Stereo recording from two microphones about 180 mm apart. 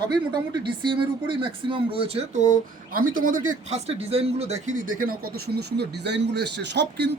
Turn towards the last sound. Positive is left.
turn(degrees=-75)  # may be behind; listen again after turning